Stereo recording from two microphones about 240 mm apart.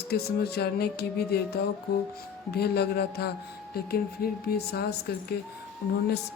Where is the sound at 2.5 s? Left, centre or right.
Left.